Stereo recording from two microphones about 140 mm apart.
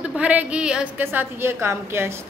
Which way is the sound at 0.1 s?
10° right (ahead or behind).